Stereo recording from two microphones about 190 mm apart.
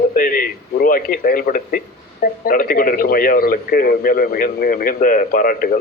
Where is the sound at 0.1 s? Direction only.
45° left (ahead or behind).